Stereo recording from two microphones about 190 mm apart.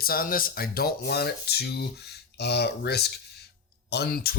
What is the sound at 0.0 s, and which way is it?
Speech, 50° left (ahead or behind).